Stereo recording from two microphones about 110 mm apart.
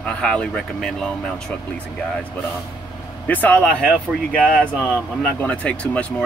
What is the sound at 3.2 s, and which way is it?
Speech, 15° left (ahead or behind).